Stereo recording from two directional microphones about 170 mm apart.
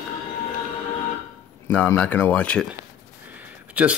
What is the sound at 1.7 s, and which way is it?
Speech, 10° left (ahead or behind).